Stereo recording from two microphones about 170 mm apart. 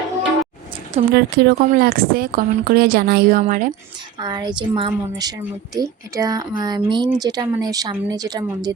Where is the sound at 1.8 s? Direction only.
60° right (ahead or behind).